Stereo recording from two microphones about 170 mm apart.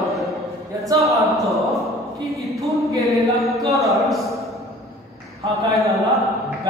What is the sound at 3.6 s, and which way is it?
Speech, 20° right (ahead or behind).